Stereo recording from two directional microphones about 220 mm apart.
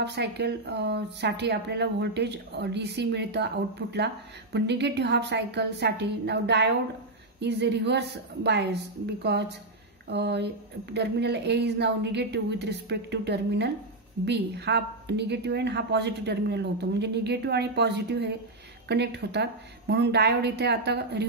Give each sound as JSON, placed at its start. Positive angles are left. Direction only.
{"t": 0.0, "sound": "a woman's voice", "side_deg": -50}